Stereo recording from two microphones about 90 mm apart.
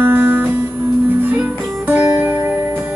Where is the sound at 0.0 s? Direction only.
25° right (ahead or behind).